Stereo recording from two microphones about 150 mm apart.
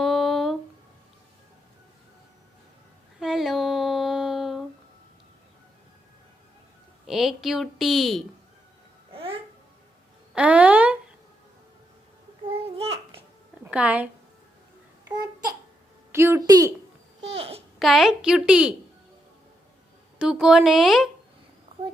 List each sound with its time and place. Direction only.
0.0 s a sound: centre (ahead or behind)
3.2 s a sound: centre (ahead or behind)
7.1 s a woman's voice: centre (ahead or behind)
9.1 s babbling: 35° right (ahead or behind)
10.3 s a sound: 10° right (ahead or behind)
12.5 s babbling: 40° right (ahead or behind)
13.7 s a woman's voice: 10° right (ahead or behind)
15.0 s babbling: 25° right (ahead or behind)
16.1 s a woman's voice: 15° right (ahead or behind)
17.2 s babbling: 40° right (ahead or behind)
17.7 s a woman's voice: centre (ahead or behind)
20.1 s a woman's voice: 5° right (ahead or behind)